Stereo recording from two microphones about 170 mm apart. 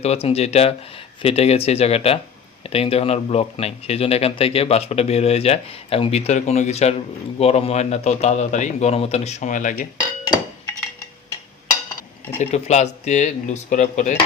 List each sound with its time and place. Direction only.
0.0 s speech: 35° left (ahead or behind)
10.0 s a sound: 25° left (ahead or behind)
12.4 s speech: 40° left (ahead or behind)